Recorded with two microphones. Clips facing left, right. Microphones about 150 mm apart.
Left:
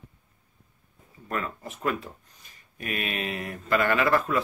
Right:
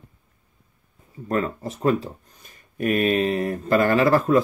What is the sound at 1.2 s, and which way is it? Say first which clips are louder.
Speech: right 8 dB; 35° right (ahead or behind).